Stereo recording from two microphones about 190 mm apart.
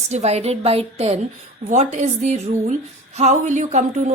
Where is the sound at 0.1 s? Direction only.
35° right (ahead or behind).